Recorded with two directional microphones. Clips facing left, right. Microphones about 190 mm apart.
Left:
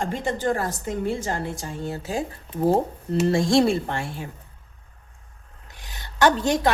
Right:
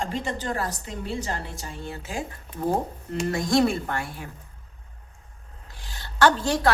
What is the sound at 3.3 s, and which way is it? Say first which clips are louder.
A woman's voice: left 2 dB; 30° left (ahead or behind).